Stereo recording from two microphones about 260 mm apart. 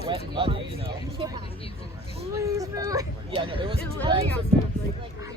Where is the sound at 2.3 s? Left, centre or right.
Centre.